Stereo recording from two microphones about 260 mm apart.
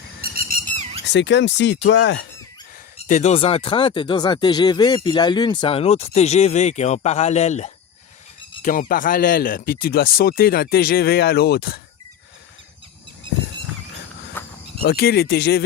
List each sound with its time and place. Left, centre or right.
0.2 s bird: right
1.0 s speech: left
3.1 s a man's voice: left
14.4 s insect: centre
14.8 s a man's voice: left